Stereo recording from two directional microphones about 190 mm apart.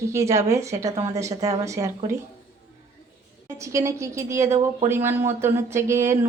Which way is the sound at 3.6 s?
15° right (ahead or behind).